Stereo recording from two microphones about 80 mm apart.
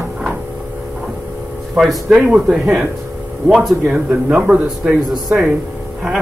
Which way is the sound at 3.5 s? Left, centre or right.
Centre.